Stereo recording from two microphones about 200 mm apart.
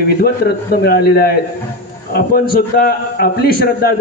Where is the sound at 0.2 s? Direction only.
50° left (ahead or behind).